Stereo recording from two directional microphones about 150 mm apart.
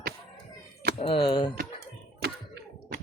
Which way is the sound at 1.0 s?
35° left (ahead or behind).